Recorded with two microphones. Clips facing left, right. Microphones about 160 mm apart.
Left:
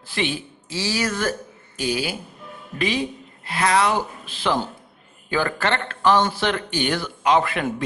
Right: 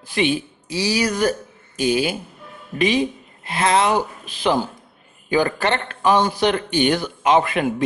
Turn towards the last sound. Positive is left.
turn(degrees=-20)  # may be behind; listen again after turning